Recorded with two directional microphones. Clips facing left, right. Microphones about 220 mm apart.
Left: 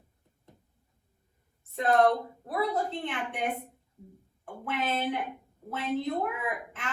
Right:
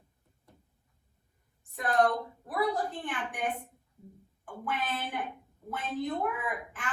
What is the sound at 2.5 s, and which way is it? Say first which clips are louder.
Speech: left 1 dB; 25° left (ahead or behind).